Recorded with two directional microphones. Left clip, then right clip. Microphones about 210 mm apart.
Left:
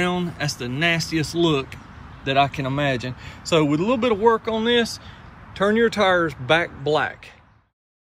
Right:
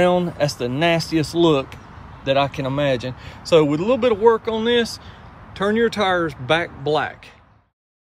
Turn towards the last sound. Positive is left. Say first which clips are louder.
# even
turn(degrees=-10)  # may be behind; listen again after turning